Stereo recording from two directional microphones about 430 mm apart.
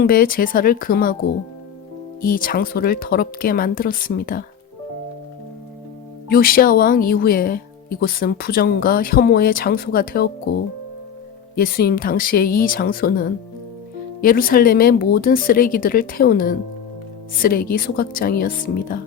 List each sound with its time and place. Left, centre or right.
0.0 s speech: centre
2.2 s speech: centre
6.2 s speech: left
11.5 s speech: left